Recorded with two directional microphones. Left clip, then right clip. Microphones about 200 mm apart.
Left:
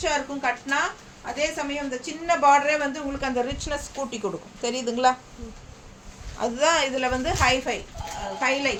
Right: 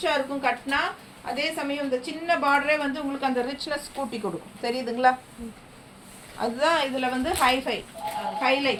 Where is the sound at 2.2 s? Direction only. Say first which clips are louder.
Left 4 dB; 15° left (ahead or behind).